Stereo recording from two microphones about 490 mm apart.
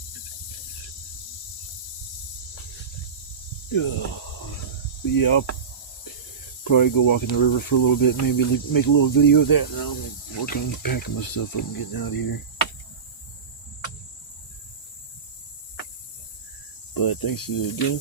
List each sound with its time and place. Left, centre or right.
3.7 s speech: left
5.1 s speech: left
6.7 s speech: left
16.9 s speech: left